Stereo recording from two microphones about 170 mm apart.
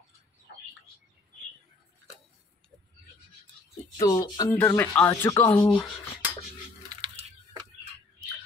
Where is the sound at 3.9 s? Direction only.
20° left (ahead or behind).